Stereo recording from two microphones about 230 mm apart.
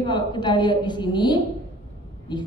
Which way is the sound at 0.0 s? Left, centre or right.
Centre.